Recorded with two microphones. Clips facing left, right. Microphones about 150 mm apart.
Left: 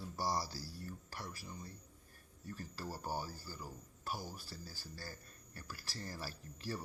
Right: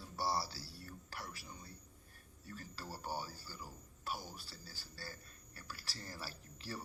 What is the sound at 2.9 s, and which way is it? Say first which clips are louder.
Speech: even; 45° left (ahead or behind).